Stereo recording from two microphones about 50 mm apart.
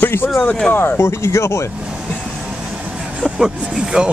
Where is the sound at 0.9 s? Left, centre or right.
Left.